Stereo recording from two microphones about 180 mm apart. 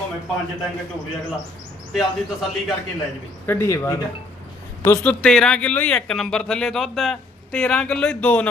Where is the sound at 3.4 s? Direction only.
15° left (ahead or behind).